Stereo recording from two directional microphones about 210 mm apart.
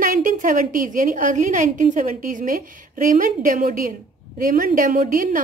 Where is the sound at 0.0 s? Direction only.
40° right (ahead or behind).